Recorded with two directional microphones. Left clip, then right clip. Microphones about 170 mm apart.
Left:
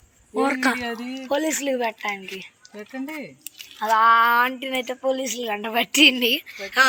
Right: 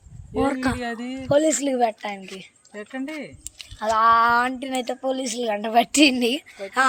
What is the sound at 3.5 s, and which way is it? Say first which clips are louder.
Speech: left 2 dB; 90° right.